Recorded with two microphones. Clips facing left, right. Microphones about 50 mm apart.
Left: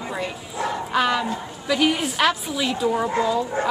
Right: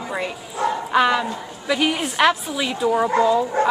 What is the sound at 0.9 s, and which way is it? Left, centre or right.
A woman's voice, centre.